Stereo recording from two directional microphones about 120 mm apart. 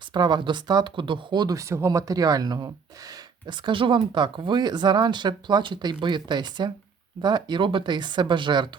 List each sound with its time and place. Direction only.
0.1 s speech: 40° right (ahead or behind)